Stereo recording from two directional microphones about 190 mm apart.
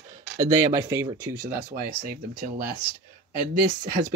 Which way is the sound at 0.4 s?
20° right (ahead or behind).